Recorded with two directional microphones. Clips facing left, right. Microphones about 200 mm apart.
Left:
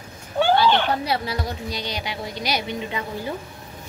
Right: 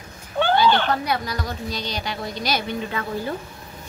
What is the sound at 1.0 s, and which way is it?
A woman's voice, 30° left (ahead or behind).